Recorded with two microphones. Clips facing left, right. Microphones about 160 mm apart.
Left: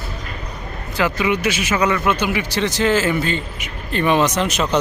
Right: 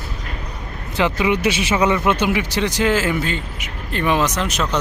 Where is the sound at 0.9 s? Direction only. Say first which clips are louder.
Right 1 dB; 20° right (ahead or behind).